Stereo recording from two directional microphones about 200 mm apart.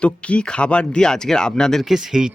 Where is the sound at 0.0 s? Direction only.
5° left (ahead or behind).